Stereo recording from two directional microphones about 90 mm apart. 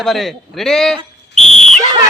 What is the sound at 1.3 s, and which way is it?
Whistle, 5° left (ahead or behind).